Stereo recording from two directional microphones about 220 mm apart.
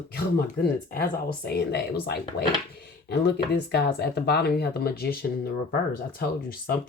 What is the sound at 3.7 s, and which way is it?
Speech, 45° left (ahead or behind).